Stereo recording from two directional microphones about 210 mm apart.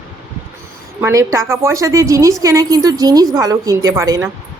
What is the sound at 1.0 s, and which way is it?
Speech, 15° right (ahead or behind).